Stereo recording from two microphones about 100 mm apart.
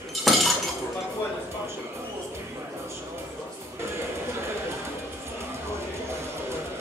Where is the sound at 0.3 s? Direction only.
Centre (ahead or behind).